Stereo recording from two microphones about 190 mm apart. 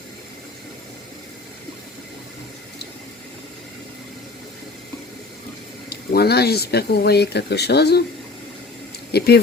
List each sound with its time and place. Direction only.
5.9 s speech: 55° left (ahead or behind)
9.1 s speech: 55° left (ahead or behind)